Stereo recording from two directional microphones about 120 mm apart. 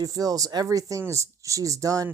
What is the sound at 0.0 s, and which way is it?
Speech, 30° right (ahead or behind).